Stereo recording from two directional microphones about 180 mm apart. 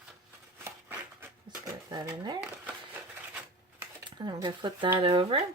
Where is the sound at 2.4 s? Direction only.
10° right (ahead or behind).